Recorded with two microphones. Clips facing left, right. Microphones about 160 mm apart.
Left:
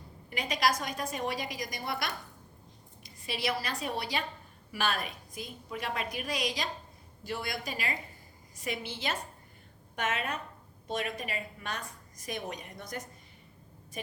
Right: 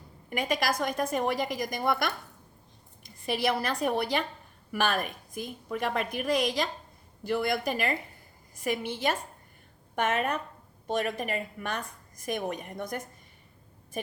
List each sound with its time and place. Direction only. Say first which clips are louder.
0.3 s a woman's voice: right 2 dB; 55° right (ahead or behind)
3.2 s a woman's voice: right 6 dB; 55° right (ahead or behind)